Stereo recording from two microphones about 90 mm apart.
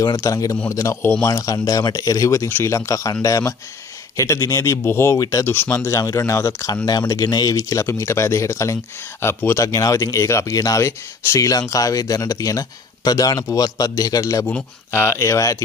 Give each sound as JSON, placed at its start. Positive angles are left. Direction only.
{"t": 0.0, "sound": "speech", "side_deg": 40}
{"t": 7.5, "sound": "speech", "side_deg": 30}
{"t": 9.7, "sound": "speech", "side_deg": 40}
{"t": 14.9, "sound": "speech", "side_deg": 30}